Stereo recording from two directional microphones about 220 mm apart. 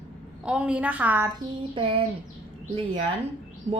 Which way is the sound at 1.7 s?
25° right (ahead or behind).